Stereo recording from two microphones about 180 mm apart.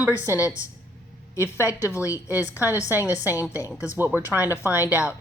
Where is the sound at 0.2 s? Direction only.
15° left (ahead or behind).